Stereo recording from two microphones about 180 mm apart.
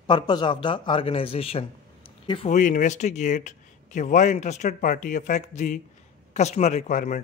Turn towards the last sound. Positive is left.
turn(degrees=45)  # may be behind; listen again after turning